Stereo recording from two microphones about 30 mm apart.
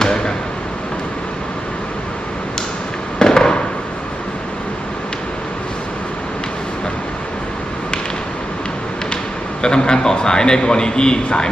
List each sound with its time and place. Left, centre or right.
0.0 s basketball bounce: left
3.2 s a sound: left
9.6 s a man's voice: left